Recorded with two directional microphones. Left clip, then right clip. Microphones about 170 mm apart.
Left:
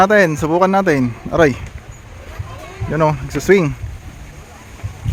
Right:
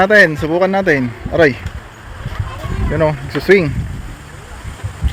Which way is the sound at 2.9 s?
25° left (ahead or behind).